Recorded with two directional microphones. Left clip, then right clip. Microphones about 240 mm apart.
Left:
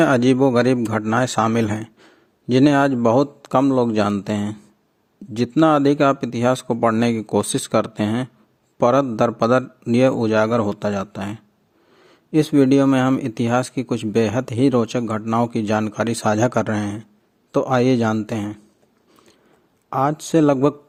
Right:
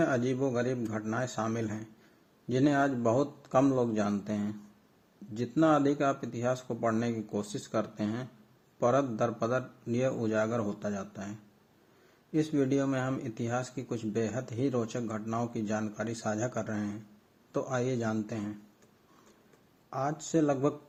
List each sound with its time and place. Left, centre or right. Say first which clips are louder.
0.0 s a man's voice: left 14 dB; left
19.9 s speech: left 13 dB; left